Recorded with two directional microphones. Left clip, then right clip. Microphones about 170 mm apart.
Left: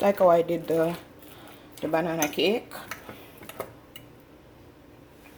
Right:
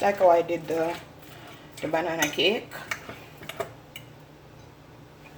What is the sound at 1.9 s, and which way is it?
Speech, 55° left (ahead or behind).